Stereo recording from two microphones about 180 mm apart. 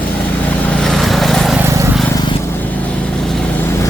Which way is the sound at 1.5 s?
15° right (ahead or behind).